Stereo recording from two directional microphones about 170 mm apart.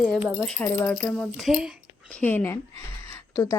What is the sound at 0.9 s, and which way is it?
Speech, 5° left (ahead or behind).